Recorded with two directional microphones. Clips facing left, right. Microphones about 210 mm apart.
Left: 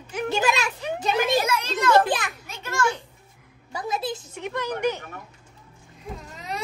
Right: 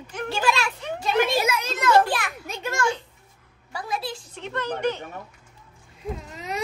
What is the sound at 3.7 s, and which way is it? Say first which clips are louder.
A child's voice: left 2 dB; 20° left (ahead or behind).